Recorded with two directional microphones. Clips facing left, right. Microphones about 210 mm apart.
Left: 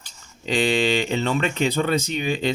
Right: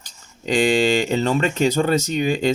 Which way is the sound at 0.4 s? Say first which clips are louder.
Right 3 dB; 45° right (ahead or behind).